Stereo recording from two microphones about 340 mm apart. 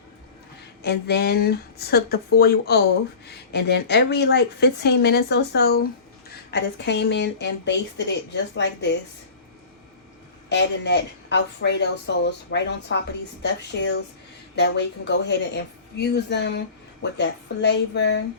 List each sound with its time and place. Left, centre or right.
0.8 s speech: left
10.5 s speech: left